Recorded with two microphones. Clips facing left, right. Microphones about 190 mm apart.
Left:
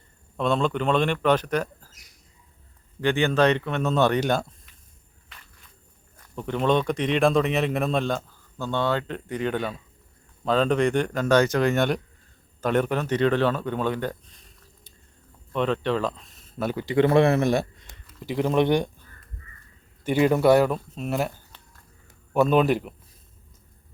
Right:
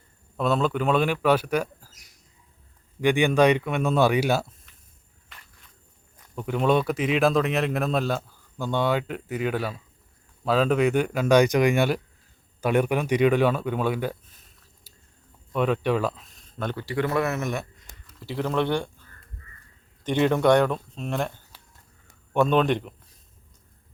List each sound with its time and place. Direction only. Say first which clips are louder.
0.3 s speech: even; 5° right (ahead or behind)
3.0 s speech: right 2 dB; 15° right (ahead or behind)
6.3 s speech: even; 5° right (ahead or behind)
15.5 s speech: right 1 dB; 10° right (ahead or behind); by 16.8 s 5° left (ahead or behind)
16.8 s speech: left 7 dB; 25° left (ahead or behind)
18.2 s speech: left 4 dB; 15° left (ahead or behind)
20.1 s speech: left 1 dB; 5° left (ahead or behind)
21.5 s a sound: left 1 dB; 10° right (ahead or behind)
22.3 s speech: left 1 dB; 5° left (ahead or behind)